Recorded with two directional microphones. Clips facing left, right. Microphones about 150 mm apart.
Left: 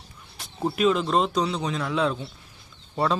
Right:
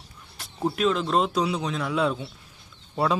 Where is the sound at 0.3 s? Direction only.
Centre (ahead or behind).